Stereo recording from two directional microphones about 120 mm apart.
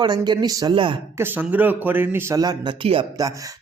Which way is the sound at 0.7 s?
45° right (ahead or behind).